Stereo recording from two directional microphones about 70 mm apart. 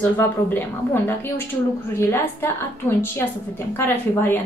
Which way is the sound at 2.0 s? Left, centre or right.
Left.